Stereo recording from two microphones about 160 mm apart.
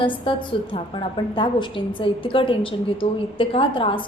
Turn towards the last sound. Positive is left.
turn(degrees=35)  # may be behind; listen again after turning